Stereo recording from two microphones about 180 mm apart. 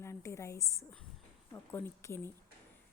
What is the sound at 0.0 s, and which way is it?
A woman's voice, 15° left (ahead or behind).